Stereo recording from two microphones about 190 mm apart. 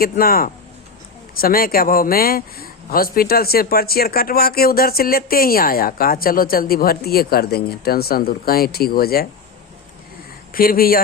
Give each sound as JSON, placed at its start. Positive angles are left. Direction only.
{"t": 0.0, "sound": "speech", "side_deg": 50}
{"t": 10.5, "sound": "speech", "side_deg": 50}